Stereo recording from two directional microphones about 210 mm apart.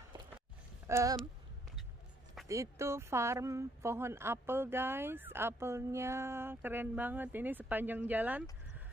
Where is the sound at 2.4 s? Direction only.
15° right (ahead or behind).